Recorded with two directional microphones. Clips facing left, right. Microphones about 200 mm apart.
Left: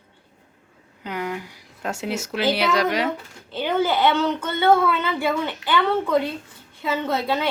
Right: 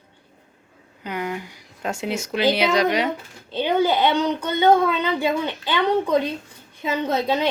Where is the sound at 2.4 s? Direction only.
15° right (ahead or behind).